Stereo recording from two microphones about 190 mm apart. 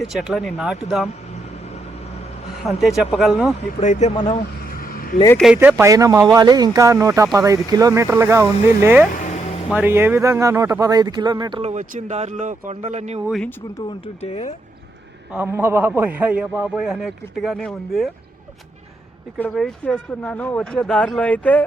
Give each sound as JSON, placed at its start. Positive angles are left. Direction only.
{"t": 0.0, "sound": "speech", "side_deg": 0}
{"t": 2.6, "sound": "speech", "side_deg": 0}
{"t": 3.8, "sound": "speech", "side_deg": 35}
{"t": 4.7, "sound": "vehicle", "side_deg": 50}
{"t": 5.5, "sound": "a man's voice", "side_deg": -15}
{"t": 9.2, "sound": "a sound", "side_deg": 35}
{"t": 9.7, "sound": "speech", "side_deg": -10}
{"t": 13.2, "sound": "speech", "side_deg": 0}
{"t": 14.2, "sound": "speech", "side_deg": 35}
{"t": 15.3, "sound": "a man's voice", "side_deg": -10}
{"t": 19.4, "sound": "speech", "side_deg": 5}